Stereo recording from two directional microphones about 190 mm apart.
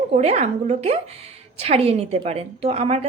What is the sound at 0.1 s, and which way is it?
A woman's voice, 35° right (ahead or behind).